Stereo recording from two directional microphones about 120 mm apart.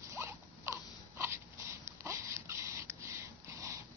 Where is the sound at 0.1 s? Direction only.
25° right (ahead or behind).